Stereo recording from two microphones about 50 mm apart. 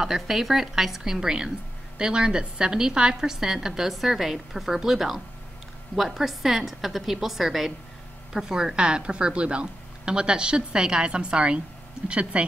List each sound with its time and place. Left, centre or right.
0.0 s a woman's voice: centre; by 12.4 s right